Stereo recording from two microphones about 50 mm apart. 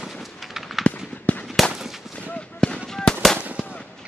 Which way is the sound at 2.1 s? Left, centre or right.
Left.